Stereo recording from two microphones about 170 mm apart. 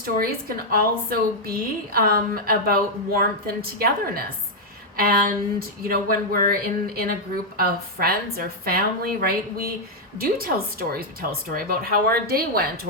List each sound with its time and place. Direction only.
0.0 s a woman's voice: 60° right (ahead or behind)
10.2 s a woman's voice: 60° right (ahead or behind)